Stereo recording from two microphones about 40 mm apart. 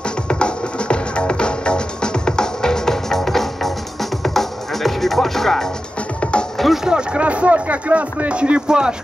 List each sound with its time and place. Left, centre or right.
0.3 s music: left; by 5.7 s centre
6.6 s music: centre
7.2 s speech: right